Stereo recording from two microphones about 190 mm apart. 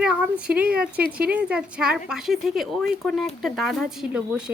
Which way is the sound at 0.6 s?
50° right (ahead or behind).